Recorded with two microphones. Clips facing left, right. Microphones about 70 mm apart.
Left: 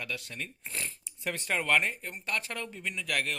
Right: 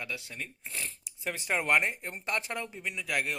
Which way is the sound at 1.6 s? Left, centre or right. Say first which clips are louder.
Even; right.